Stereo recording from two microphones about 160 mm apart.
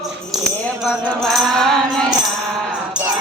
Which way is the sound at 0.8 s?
Centre (ahead or behind).